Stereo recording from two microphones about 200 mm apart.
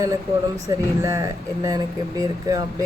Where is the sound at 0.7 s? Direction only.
15° right (ahead or behind).